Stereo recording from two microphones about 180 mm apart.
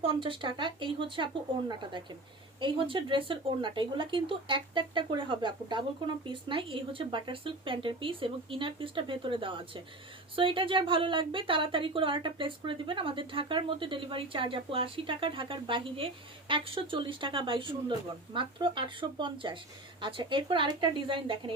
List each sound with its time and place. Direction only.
0.0 s a woman's voice: 30° right (ahead or behind)